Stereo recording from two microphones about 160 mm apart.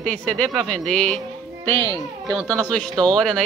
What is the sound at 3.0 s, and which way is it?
Speech, 5° left (ahead or behind).